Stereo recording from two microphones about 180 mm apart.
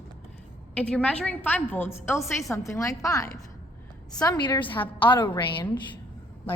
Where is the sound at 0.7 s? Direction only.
10° left (ahead or behind); by 5.7 s 25° left (ahead or behind).